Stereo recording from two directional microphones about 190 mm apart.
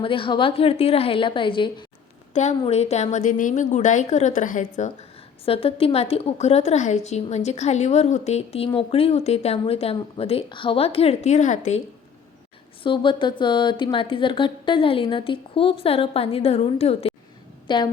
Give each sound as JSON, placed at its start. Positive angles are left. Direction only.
{"t": 0.0, "sound": "a woman's voice", "side_deg": 25}
{"t": 2.3, "sound": "a woman's voice", "side_deg": 35}
{"t": 5.5, "sound": "a woman's voice", "side_deg": 30}
{"t": 12.8, "sound": "a woman's voice", "side_deg": 25}